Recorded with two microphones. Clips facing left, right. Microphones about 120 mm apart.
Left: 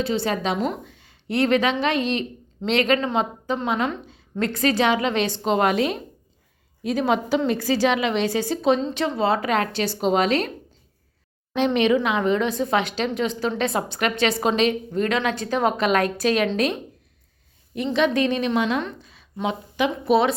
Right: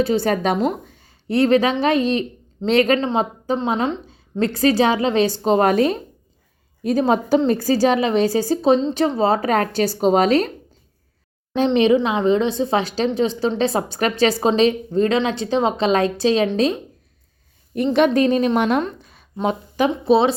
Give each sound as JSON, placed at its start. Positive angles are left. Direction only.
{"t": 0.0, "sound": "a woman's voice", "side_deg": -45}
{"t": 11.5, "sound": "a woman's voice", "side_deg": -35}
{"t": 17.7, "sound": "a woman's voice", "side_deg": -50}